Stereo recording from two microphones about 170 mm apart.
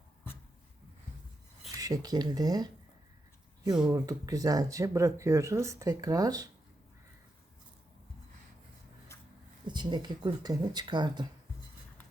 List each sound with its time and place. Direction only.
1.7 s speech: 20° right (ahead or behind)
3.8 s speech: 20° right (ahead or behind)
9.6 s speech: 25° right (ahead or behind)